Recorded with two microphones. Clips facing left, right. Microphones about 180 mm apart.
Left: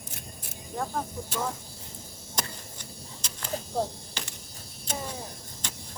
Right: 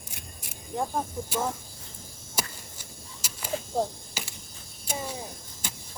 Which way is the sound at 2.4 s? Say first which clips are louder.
Right 1 dB; 5° right (ahead or behind).